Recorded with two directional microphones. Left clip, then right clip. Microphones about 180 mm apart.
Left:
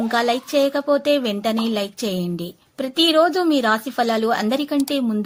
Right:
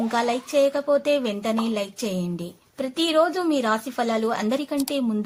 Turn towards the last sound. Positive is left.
turn(degrees=25)  # may be behind; listen again after turning